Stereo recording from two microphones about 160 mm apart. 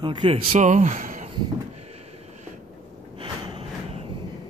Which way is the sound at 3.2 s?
35° right (ahead or behind).